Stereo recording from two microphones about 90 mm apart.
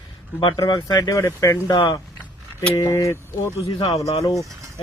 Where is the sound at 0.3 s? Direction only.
70° left (ahead or behind).